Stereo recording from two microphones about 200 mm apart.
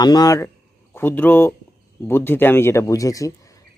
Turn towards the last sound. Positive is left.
turn(degrees=15)  # may be behind; listen again after turning